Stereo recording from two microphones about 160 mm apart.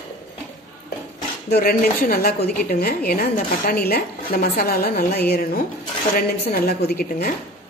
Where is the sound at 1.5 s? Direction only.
65° left (ahead or behind).